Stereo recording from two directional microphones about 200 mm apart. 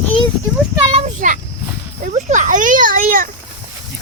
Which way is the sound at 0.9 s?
35° right (ahead or behind).